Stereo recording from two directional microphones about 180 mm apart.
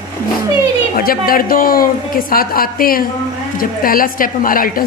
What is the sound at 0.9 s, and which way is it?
A woman's voice, 55° left (ahead or behind).